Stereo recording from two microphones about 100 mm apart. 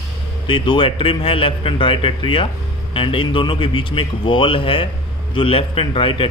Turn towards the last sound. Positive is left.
turn(degrees=65)  # may be behind; listen again after turning